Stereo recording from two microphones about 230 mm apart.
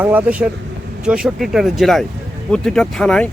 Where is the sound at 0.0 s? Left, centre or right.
Centre.